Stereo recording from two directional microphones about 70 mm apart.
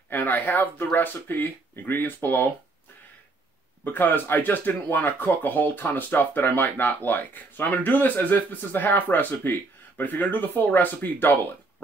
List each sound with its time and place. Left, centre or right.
0.1 s speech: left
3.8 s speech: left